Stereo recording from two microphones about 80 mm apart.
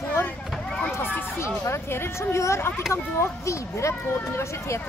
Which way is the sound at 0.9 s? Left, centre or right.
Left.